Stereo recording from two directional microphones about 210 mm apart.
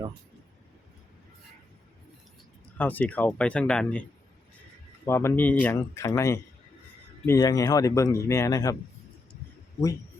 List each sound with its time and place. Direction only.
2.7 s speech: 5° left (ahead or behind)
5.0 s speech: 10° left (ahead or behind)